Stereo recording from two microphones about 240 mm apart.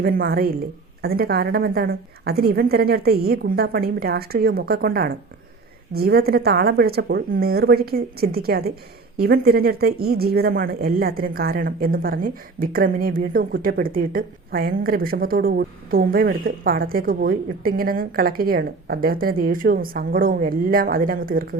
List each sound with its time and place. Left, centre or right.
0.0 s speech: right